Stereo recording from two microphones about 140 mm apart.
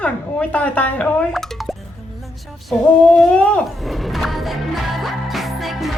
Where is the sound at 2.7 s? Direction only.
5° left (ahead or behind).